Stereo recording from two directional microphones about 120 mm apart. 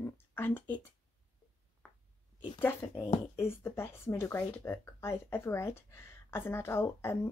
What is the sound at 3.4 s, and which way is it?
Speech, 20° left (ahead or behind).